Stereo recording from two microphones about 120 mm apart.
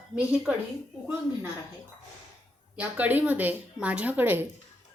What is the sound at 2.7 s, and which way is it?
Speech, 10° right (ahead or behind).